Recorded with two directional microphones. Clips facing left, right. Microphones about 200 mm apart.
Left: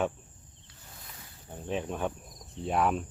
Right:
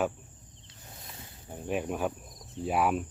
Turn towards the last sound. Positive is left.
turn(degrees=-5)  # may be behind; listen again after turning